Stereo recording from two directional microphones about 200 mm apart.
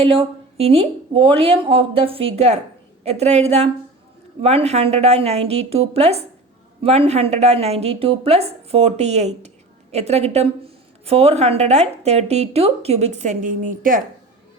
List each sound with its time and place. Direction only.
0.0 s speech: 30° right (ahead or behind)